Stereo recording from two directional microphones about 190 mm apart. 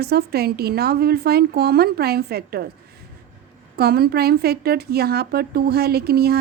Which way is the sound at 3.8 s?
55° right (ahead or behind).